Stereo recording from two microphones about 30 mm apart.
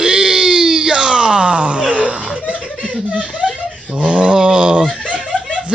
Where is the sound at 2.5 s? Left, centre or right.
Left.